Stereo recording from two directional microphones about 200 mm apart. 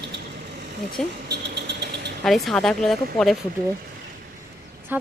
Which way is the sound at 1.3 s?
55° right (ahead or behind).